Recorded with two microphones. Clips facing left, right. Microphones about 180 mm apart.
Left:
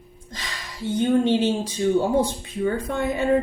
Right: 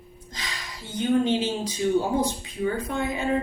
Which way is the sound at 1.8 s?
40° left (ahead or behind).